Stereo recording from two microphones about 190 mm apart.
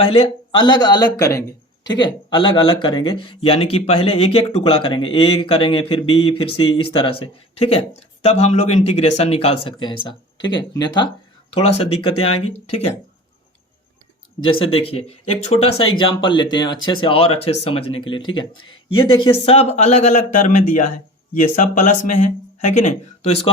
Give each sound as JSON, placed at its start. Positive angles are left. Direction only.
{"t": 0.0, "sound": "speech", "side_deg": 30}
{"t": 14.6, "sound": "speech", "side_deg": 30}